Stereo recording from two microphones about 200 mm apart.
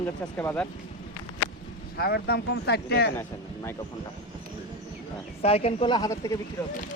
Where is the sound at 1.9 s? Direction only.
50° left (ahead or behind).